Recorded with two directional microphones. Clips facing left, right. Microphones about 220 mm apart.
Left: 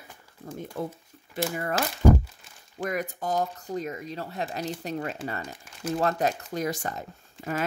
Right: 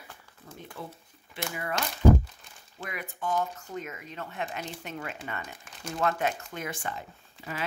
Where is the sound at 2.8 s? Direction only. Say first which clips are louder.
Left 6 dB; 40° left (ahead or behind).